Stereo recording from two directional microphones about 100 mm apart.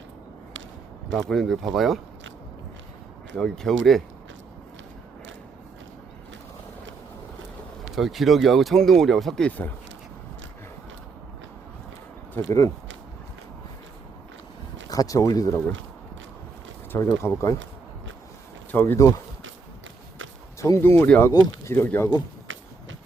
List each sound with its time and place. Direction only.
1.1 s speech: 5° left (ahead or behind)
3.3 s speech: 5° left (ahead or behind)
7.9 s speech: centre (ahead or behind)
12.5 s speech: 35° left (ahead or behind)
14.8 s speech: 35° left (ahead or behind)
17.2 s speech: 30° left (ahead or behind)
18.7 s speech: 20° left (ahead or behind)
20.6 s speech: 30° left (ahead or behind)